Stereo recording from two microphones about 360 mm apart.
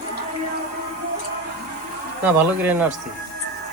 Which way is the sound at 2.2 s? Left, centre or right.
Centre.